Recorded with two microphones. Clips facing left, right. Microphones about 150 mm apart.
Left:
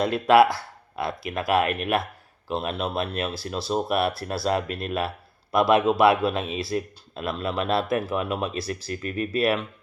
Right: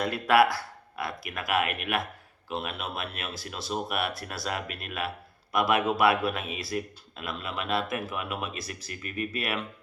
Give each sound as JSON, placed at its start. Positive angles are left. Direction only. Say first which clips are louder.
{"t": 0.0, "sound": "speech", "louder": "left 5 dB", "side_deg": 25}